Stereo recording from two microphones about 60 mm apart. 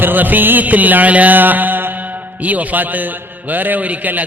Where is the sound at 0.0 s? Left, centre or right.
Right.